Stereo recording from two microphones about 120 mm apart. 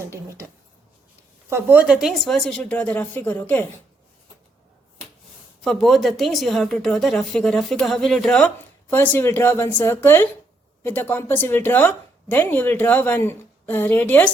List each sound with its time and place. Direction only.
0.0 s speech: 20° right (ahead or behind)
1.5 s speech: 20° right (ahead or behind)
2.2 s a woman's voice: 5° left (ahead or behind)
5.6 s a woman's voice: centre (ahead or behind)